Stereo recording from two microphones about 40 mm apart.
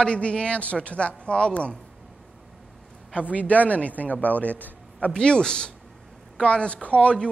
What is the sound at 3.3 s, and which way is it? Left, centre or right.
A man's voice, left.